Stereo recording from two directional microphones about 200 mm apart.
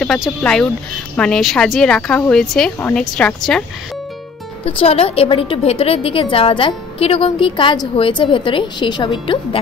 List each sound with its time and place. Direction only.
0.0 s speech: centre (ahead or behind)
4.6 s a woman's voice: 30° left (ahead or behind)